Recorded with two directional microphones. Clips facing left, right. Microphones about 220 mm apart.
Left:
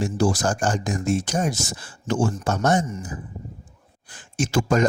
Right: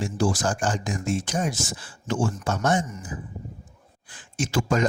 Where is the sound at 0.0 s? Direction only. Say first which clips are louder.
Left 3 dB; 40° left (ahead or behind).